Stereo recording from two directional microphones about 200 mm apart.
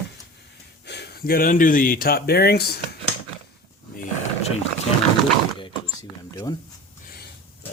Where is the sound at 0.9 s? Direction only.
55° left (ahead or behind).